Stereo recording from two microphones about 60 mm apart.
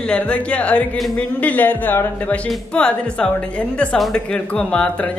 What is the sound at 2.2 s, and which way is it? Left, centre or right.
Speech, centre.